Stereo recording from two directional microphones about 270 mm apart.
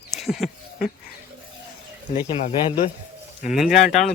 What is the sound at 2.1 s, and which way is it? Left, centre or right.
Speech, left.